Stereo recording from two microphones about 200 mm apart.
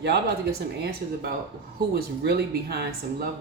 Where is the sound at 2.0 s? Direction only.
50° right (ahead or behind).